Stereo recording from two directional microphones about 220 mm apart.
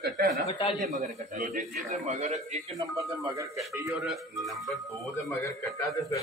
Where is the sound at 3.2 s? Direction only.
15° right (ahead or behind).